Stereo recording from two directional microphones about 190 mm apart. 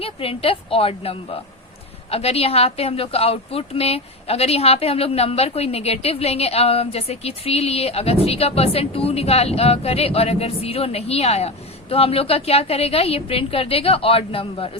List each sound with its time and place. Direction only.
0.0 s a woman's voice: 30° left (ahead or behind)